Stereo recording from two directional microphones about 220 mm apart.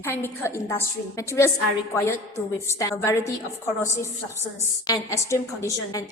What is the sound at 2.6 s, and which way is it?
Speech, 15° left (ahead or behind).